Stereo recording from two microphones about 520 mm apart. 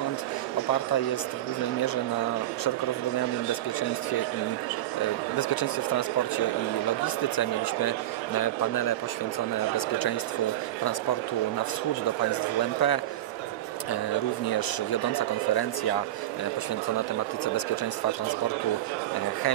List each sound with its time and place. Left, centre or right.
5.4 s speech: left
8.4 s speech: left
12.8 s speech: left
14.4 s speech: left